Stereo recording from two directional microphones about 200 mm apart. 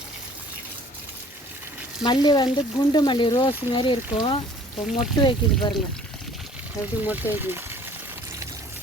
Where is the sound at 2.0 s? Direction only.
20° left (ahead or behind).